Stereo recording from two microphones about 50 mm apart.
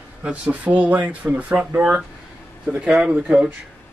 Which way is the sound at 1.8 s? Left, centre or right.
Centre.